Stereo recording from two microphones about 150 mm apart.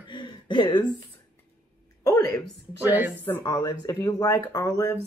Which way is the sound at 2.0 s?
20° left (ahead or behind).